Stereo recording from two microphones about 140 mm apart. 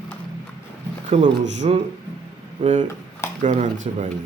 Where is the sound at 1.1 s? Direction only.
50° right (ahead or behind).